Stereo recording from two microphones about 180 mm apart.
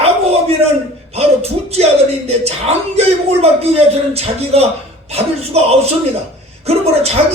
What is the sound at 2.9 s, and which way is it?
A man's voice, 35° right (ahead or behind).